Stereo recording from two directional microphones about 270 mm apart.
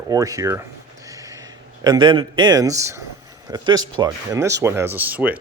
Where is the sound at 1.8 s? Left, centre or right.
Centre.